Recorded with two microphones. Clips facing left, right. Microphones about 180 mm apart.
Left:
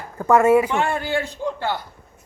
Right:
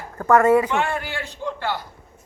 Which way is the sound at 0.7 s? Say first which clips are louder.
Left 2 dB; 25° left (ahead or behind).